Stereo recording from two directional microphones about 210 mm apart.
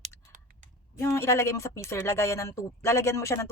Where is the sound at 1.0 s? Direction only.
15° left (ahead or behind).